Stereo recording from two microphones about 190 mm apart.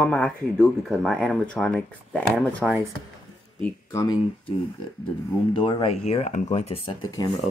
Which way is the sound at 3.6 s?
10° left (ahead or behind).